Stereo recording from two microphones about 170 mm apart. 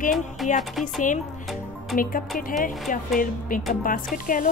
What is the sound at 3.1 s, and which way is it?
Speech, 55° left (ahead or behind).